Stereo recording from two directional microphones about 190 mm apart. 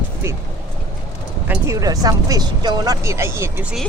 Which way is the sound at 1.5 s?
15° right (ahead or behind).